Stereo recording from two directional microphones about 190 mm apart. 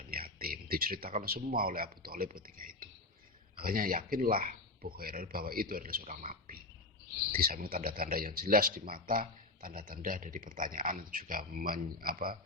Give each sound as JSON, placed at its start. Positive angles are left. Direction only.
{"t": 0.1, "sound": "speech", "side_deg": -50}